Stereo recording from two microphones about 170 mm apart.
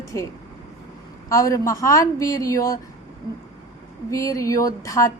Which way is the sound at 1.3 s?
20° left (ahead or behind).